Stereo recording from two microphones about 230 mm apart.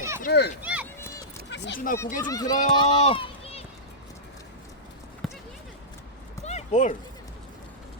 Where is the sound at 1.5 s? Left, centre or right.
Left.